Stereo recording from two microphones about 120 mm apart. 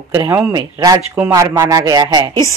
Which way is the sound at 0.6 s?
30° right (ahead or behind).